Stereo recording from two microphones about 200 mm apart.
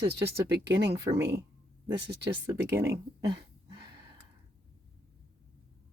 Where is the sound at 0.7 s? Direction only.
60° right (ahead or behind).